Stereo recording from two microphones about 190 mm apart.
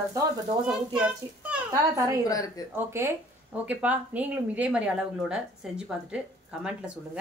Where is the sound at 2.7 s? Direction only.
10° right (ahead or behind).